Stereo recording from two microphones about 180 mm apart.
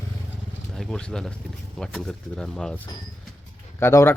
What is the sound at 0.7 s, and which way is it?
Speech, centre (ahead or behind).